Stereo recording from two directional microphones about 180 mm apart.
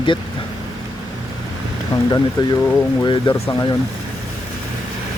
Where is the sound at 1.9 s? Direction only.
25° left (ahead or behind).